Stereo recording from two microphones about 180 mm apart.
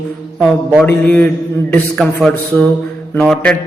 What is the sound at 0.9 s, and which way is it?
A man's voice, 10° left (ahead or behind).